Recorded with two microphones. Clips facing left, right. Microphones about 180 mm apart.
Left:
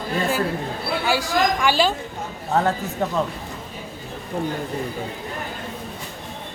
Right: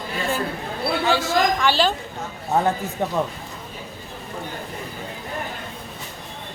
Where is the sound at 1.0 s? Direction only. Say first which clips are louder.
Even; 10° left (ahead or behind).